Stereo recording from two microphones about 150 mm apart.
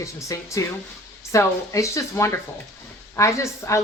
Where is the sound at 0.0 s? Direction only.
20° left (ahead or behind).